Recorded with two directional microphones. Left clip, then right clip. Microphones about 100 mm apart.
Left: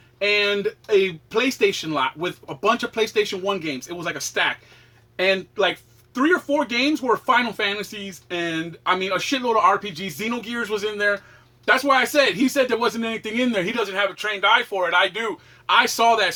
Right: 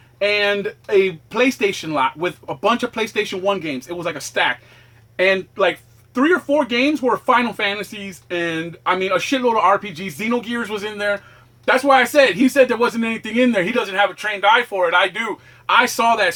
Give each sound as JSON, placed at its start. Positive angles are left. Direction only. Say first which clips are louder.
{"t": 0.2, "sound": "speech", "louder": "right 2 dB", "side_deg": -20}